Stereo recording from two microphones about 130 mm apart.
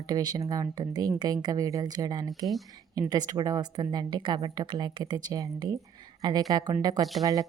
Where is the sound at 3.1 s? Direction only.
30° right (ahead or behind).